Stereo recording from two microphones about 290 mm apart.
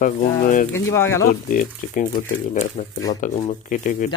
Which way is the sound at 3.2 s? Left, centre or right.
Left.